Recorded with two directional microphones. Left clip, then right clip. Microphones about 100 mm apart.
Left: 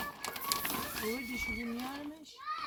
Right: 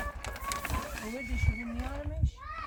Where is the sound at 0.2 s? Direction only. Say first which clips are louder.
Even; 90° right.